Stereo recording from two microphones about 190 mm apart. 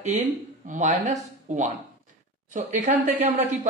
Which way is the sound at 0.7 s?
40° right (ahead or behind).